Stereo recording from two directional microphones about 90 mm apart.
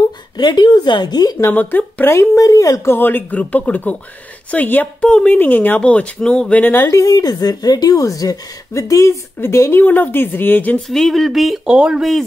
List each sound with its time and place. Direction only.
0.4 s a woman's voice: 55° left (ahead or behind)
1.5 s speech: 20° left (ahead or behind)
2.1 s speech: 40° left (ahead or behind); by 6.9 s 20° left (ahead or behind)
6.9 s speech: 40° left (ahead or behind); by 10.8 s 20° left (ahead or behind)
10.9 s speech: 5° left (ahead or behind)